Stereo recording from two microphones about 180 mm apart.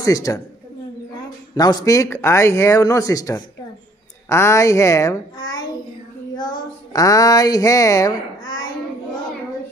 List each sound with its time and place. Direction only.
0.0 s speech: 20° left (ahead or behind)
1.5 s a woman's voice: 20° left (ahead or behind)
6.3 s speech: 25° left (ahead or behind)